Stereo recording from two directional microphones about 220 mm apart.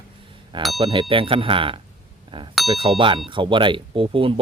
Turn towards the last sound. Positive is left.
turn(degrees=-25)  # may be behind; listen again after turning